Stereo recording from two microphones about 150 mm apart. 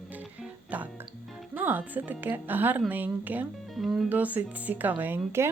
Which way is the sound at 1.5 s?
10° right (ahead or behind).